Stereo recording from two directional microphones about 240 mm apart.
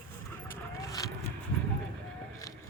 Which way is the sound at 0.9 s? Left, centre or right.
Centre.